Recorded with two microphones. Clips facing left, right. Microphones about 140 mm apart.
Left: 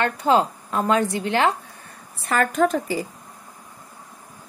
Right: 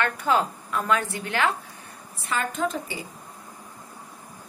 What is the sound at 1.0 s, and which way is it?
Speech, 20° left (ahead or behind).